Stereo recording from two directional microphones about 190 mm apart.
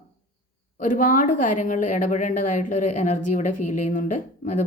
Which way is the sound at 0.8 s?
45° left (ahead or behind).